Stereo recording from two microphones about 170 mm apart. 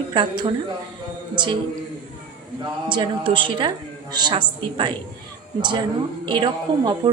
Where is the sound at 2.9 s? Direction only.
30° right (ahead or behind).